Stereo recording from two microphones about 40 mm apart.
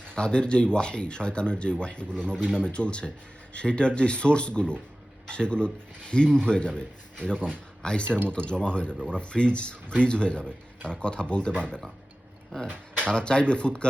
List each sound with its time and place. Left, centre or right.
0.1 s a man's voice: left
12.6 s a sound: right
13.1 s a man's voice: left